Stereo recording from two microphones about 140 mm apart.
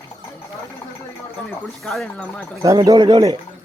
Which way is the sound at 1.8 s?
Centre (ahead or behind).